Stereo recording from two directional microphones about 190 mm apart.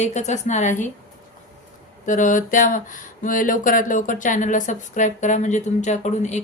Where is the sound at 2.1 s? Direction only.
40° left (ahead or behind).